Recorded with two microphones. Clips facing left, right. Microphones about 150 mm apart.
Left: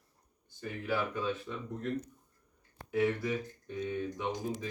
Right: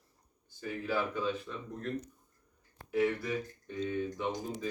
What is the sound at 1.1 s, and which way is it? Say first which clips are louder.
Speech: even; 10° left (ahead or behind).